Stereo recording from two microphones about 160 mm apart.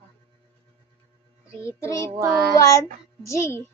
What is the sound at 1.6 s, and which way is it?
Child singing, 15° left (ahead or behind).